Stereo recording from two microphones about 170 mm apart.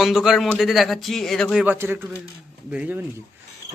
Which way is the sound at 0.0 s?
Centre (ahead or behind).